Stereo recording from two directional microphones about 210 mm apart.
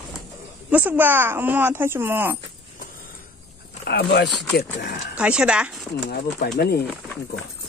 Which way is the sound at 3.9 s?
50° left (ahead or behind).